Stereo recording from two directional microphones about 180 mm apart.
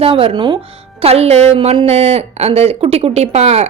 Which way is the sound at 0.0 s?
30° right (ahead or behind).